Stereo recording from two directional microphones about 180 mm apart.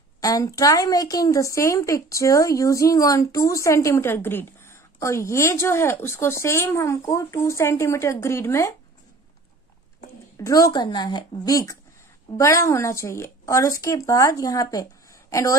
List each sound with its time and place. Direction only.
0.2 s a woman's voice: 20° left (ahead or behind)
10.3 s a woman's voice: 20° left (ahead or behind)